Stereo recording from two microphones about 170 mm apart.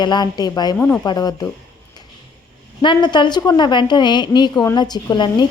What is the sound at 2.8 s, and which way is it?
A woman's voice, 25° left (ahead or behind).